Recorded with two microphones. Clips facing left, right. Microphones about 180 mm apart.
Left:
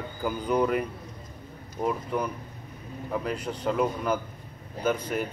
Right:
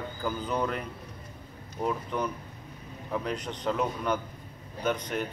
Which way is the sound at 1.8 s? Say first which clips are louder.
Left 2 dB; 5° left (ahead or behind).